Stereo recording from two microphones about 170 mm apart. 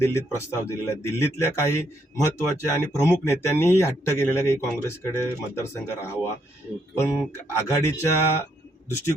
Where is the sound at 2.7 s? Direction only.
15° left (ahead or behind).